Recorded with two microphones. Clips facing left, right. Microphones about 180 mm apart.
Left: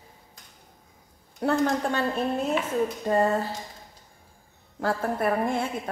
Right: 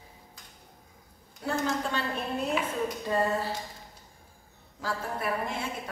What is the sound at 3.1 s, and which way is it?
Speech, 50° left (ahead or behind).